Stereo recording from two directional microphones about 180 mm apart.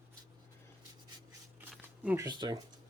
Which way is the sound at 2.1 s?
25° right (ahead or behind).